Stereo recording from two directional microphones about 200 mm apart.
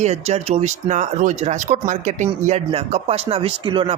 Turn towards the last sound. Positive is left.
turn(degrees=-25)  # may be behind; listen again after turning